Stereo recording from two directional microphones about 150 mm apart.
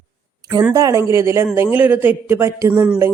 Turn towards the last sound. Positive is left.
turn(degrees=-15)  # may be behind; listen again after turning